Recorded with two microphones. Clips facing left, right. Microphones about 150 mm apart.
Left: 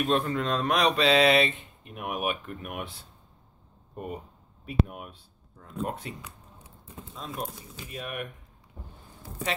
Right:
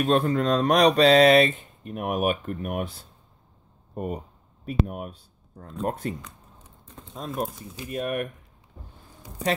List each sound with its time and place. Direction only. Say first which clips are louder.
0.0 s mantra: right 5 dB; 40° right (ahead or behind)
3.9 s speech: right 5 dB; 45° right (ahead or behind)
6.9 s a sound: left 2 dB; 10° left (ahead or behind)
7.9 s speech: right 8 dB; 45° right (ahead or behind)